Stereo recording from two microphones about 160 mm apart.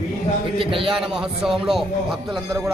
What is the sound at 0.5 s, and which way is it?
Speech, 35° right (ahead or behind).